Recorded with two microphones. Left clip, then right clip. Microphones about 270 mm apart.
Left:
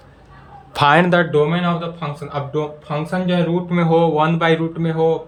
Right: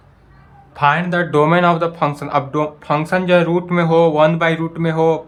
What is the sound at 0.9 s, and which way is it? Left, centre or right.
Speech, centre.